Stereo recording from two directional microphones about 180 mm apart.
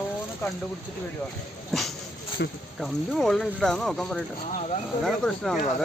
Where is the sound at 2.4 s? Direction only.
65° left (ahead or behind).